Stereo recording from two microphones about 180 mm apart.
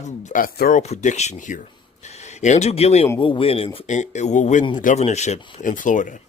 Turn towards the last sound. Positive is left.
turn(degrees=45)  # may be behind; listen again after turning